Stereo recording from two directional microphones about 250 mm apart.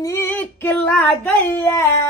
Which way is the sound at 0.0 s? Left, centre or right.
Centre.